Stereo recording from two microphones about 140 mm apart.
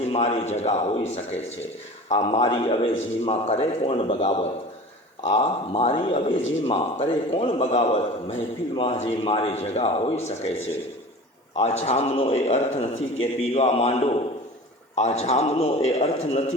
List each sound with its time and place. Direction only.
0.1 s speech: 45° left (ahead or behind)
11.5 s speech: 50° left (ahead or behind)